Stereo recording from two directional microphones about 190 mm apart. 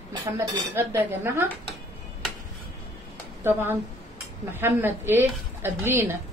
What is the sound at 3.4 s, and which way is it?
Speech, 10° right (ahead or behind).